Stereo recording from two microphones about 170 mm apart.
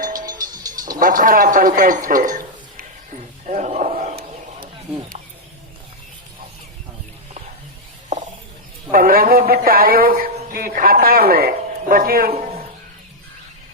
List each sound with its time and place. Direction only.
0.0 s music: 50° right (ahead or behind)
0.4 s music: 20° right (ahead or behind)
0.9 s a sound: 55° right (ahead or behind)
4.1 s wild animals: 70° right (ahead or behind)
8.9 s a man's voice: 60° right (ahead or behind)
12.3 s a sound: 40° right (ahead or behind)